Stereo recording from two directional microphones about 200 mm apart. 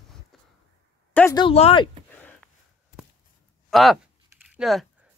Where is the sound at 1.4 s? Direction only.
30° left (ahead or behind).